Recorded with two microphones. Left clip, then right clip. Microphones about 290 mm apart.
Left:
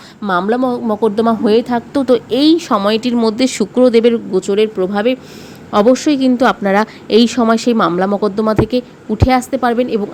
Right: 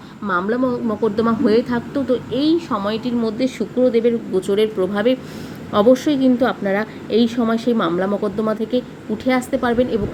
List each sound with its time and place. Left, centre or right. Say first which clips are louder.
0.3 s a woman's voice: left 5 dB; left